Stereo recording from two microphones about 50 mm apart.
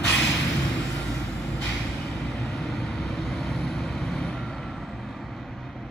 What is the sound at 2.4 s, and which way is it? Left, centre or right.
Vehicle, centre.